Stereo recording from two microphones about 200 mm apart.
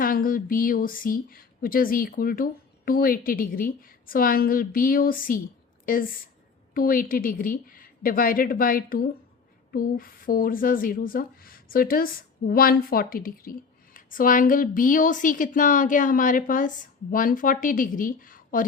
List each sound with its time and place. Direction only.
0.0 s a woman's voice: 45° left (ahead or behind)